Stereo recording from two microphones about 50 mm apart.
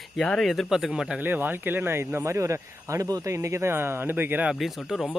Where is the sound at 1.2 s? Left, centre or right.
Right.